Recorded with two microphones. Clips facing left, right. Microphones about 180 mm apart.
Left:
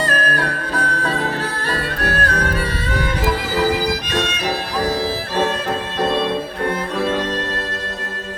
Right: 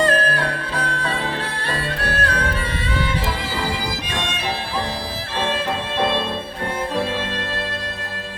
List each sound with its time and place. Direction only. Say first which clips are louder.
0.0 s music: right 2 dB; 45° left (ahead or behind)